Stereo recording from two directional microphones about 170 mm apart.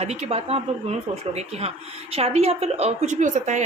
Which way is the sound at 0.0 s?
40° right (ahead or behind).